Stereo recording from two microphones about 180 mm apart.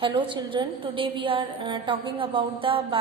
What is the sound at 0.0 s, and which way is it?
A woman's voice, 30° right (ahead or behind).